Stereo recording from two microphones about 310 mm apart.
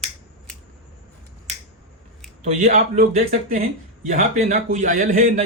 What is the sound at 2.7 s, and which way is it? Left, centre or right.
A man's voice, right.